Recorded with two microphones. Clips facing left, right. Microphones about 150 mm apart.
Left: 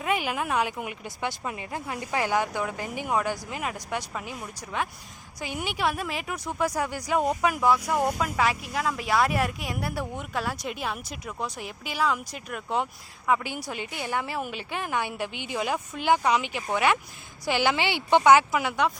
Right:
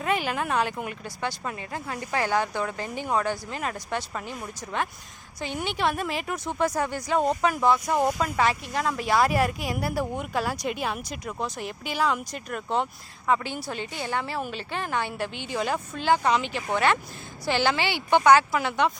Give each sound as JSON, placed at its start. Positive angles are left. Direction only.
{"t": 0.0, "sound": "speech", "side_deg": 10}